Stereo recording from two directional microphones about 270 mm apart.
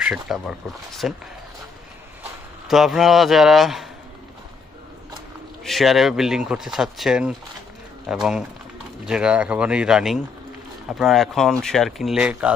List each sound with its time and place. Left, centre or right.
0.0 s speech: centre
2.7 s speech: centre
5.6 s speech: centre